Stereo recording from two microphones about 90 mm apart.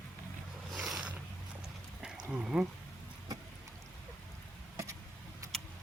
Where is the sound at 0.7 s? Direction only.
5° right (ahead or behind).